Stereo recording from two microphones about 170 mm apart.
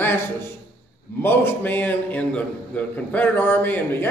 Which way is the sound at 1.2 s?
10° left (ahead or behind).